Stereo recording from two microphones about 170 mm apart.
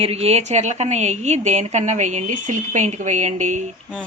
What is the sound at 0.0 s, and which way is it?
A woman's voice, 35° right (ahead or behind).